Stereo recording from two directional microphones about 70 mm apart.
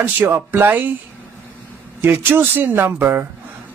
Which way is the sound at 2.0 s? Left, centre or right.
Right.